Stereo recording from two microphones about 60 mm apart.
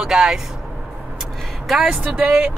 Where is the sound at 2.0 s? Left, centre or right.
Centre.